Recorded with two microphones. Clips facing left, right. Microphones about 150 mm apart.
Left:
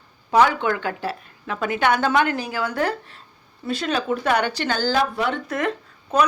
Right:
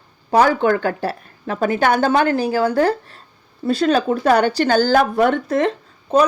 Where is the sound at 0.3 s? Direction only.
40° right (ahead or behind).